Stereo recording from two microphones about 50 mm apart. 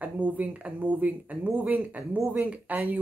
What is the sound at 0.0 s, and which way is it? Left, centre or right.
Speech, right.